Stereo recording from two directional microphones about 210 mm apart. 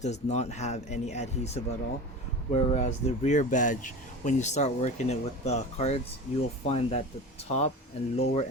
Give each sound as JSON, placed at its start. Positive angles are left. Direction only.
{"t": 0.0, "sound": "speech", "side_deg": 30}